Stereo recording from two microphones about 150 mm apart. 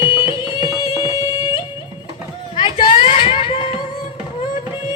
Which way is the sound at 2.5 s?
35° left (ahead or behind).